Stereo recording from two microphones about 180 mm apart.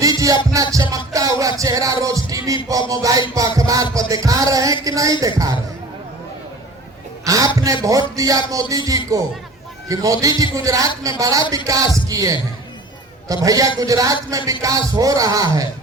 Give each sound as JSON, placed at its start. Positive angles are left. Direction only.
{"t": 0.0, "sound": "music", "side_deg": -20}
{"t": 2.9, "sound": "a man's voice", "side_deg": -20}
{"t": 7.3, "sound": "music", "side_deg": -20}
{"t": 8.1, "sound": "a man's voice", "side_deg": -20}